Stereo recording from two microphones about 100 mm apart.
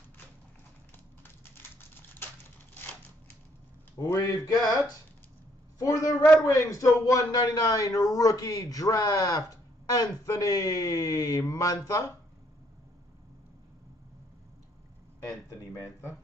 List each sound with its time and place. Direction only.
1.2 s typing: 20° left (ahead or behind)
4.0 s a man's voice: 35° left (ahead or behind)
15.2 s speech: 30° left (ahead or behind)